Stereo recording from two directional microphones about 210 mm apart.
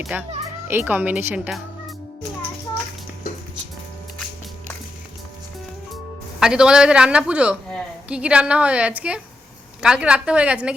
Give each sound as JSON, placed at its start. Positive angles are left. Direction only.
{"t": 0.0, "sound": "speech", "side_deg": -5}
{"t": 6.4, "sound": "a woman's voice", "side_deg": -5}